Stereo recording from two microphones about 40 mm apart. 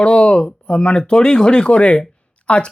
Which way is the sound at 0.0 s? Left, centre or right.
Left.